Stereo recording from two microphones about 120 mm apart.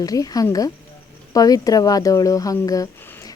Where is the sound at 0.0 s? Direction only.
30° left (ahead or behind).